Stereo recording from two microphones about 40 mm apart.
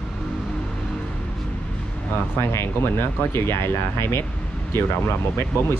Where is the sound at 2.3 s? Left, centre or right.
Left.